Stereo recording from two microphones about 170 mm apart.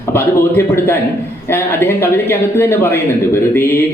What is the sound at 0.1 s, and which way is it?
A man's voice, 15° left (ahead or behind).